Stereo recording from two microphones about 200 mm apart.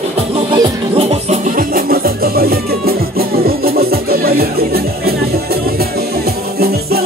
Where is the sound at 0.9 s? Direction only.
35° right (ahead or behind); by 5.6 s 50° right (ahead or behind).